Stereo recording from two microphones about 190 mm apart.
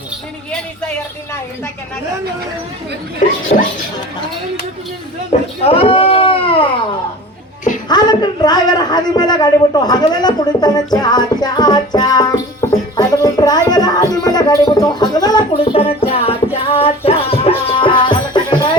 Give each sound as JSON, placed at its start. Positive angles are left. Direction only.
{"t": 3.2, "sound": "speech", "side_deg": 45}
{"t": 5.3, "sound": "speech", "side_deg": 35}
{"t": 5.6, "sound": "a sound", "side_deg": 30}
{"t": 7.9, "sound": "a man's voice", "side_deg": 20}
{"t": 12.6, "sound": "music", "side_deg": 15}